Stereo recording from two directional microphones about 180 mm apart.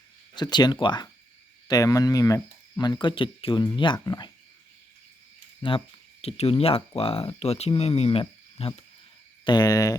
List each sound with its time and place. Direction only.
0.3 s speech: 25° left (ahead or behind)
5.6 s speech: 30° left (ahead or behind)